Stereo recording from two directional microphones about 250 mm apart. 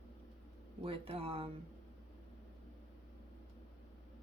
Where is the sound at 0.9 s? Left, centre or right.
Right.